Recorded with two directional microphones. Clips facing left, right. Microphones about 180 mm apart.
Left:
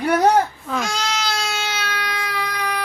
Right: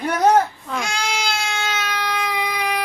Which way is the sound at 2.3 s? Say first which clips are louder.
Right 2 dB; 20° right (ahead or behind).